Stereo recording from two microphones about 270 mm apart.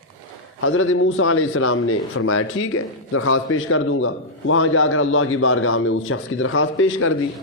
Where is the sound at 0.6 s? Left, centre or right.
Left.